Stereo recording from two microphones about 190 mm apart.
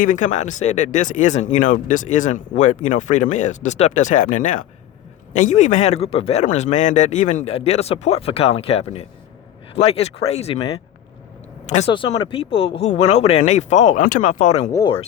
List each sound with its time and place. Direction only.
0.0 s speech: 40° left (ahead or behind)
11.7 s speech: 30° left (ahead or behind)
14.7 s speech: 20° left (ahead or behind)